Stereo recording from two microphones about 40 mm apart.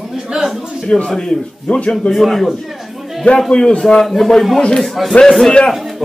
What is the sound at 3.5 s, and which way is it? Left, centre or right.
Speech, centre.